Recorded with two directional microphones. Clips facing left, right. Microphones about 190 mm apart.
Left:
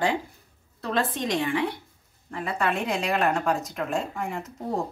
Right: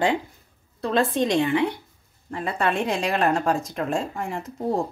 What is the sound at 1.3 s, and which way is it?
A woman's voice, 25° right (ahead or behind).